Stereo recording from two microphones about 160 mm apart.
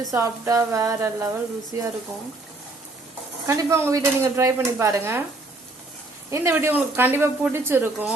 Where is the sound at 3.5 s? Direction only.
20° right (ahead or behind).